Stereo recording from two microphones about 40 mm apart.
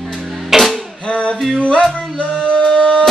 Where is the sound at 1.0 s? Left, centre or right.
Left.